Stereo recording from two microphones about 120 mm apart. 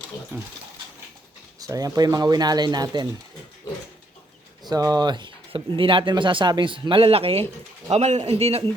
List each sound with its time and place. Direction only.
0.3 s speech: 20° right (ahead or behind)
1.5 s speech: 30° right (ahead or behind)
4.7 s speech: 30° right (ahead or behind); by 7.4 s 55° right (ahead or behind)
7.9 s a man's voice: 65° right (ahead or behind)